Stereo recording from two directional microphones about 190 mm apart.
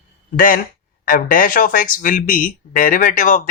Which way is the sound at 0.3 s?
45° left (ahead or behind).